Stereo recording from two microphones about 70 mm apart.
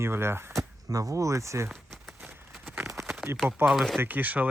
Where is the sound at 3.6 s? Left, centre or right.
Right.